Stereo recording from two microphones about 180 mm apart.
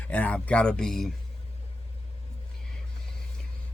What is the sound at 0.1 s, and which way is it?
Speech, 10° left (ahead or behind).